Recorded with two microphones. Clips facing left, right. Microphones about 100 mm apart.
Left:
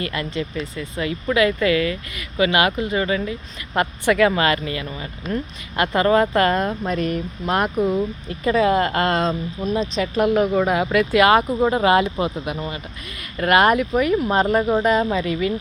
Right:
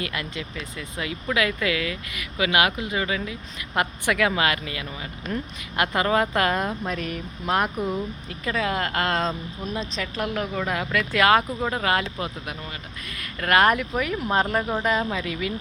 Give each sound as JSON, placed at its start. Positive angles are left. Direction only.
{"t": 0.0, "sound": "speech", "side_deg": -5}
{"t": 10.0, "sound": "speech", "side_deg": 15}
{"t": 10.9, "sound": "speech", "side_deg": 10}
{"t": 11.6, "sound": "speech", "side_deg": 15}
{"t": 13.4, "sound": "speech", "side_deg": 5}